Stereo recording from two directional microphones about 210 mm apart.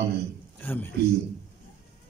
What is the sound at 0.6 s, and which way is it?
Speech, 10° left (ahead or behind).